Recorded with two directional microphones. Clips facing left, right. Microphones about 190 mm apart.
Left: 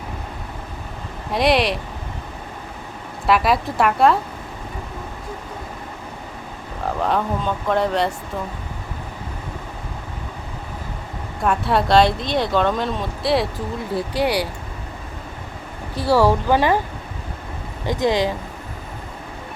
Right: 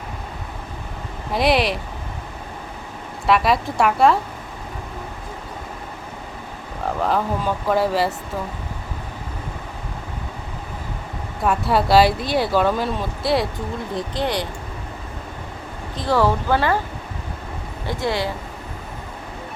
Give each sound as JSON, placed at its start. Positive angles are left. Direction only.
{"t": 1.3, "sound": "speech", "side_deg": 0}
{"t": 3.2, "sound": "speech", "side_deg": 0}
{"t": 6.8, "sound": "speech", "side_deg": 0}
{"t": 11.4, "sound": "speech", "side_deg": 0}
{"t": 16.0, "sound": "speech", "side_deg": 10}
{"t": 17.8, "sound": "speech", "side_deg": 15}